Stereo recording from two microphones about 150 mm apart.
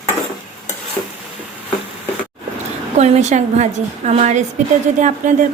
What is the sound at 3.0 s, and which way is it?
Speech, 50° right (ahead or behind).